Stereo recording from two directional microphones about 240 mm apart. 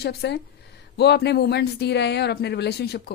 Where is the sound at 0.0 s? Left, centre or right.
Left.